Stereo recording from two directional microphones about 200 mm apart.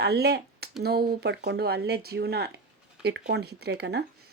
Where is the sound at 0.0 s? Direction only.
55° right (ahead or behind).